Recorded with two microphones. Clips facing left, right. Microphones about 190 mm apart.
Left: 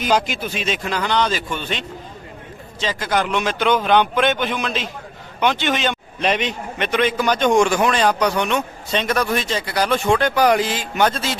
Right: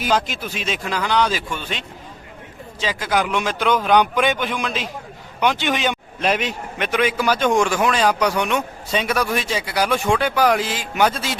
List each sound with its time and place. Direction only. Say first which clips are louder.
0.2 s a man's voice: left 3 dB; centre (ahead or behind)
2.8 s a man's voice: even; 5° right (ahead or behind)